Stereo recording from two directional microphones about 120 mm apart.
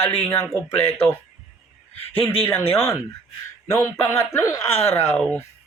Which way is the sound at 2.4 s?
20° left (ahead or behind).